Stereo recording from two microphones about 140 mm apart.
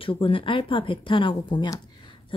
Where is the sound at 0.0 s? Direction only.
40° left (ahead or behind).